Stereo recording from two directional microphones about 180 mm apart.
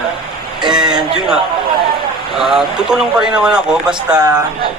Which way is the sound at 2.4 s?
Centre (ahead or behind).